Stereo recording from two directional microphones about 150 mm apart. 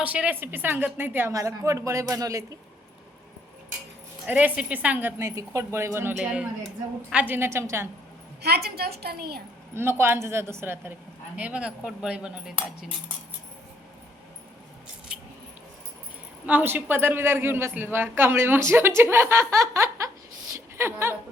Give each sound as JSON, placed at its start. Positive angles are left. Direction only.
{"t": 0.0, "sound": "a man's voice", "side_deg": -10}
{"t": 4.3, "sound": "a man's voice", "side_deg": -10}
{"t": 8.4, "sound": "a woman's voice", "side_deg": -90}
{"t": 9.7, "sound": "a man's voice", "side_deg": -15}
{"t": 16.5, "sound": "a man's voice", "side_deg": -10}
{"t": 20.5, "sound": "a sound", "side_deg": -15}